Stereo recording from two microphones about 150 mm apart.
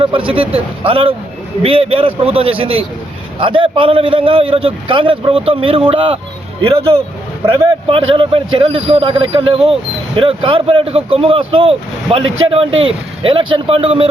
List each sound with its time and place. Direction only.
0.0 s speech: 35° right (ahead or behind)